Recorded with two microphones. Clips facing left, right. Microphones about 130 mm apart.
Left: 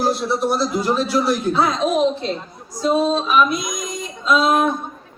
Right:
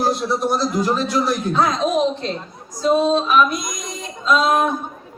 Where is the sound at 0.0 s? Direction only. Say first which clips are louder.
Even; centre (ahead or behind).